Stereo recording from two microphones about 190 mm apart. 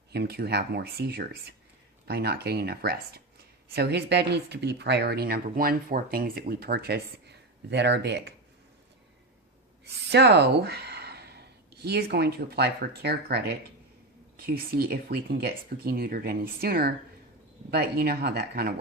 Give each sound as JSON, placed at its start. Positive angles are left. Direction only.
{"t": 0.1, "sound": "speech", "side_deg": -60}
{"t": 9.8, "sound": "speech", "side_deg": -65}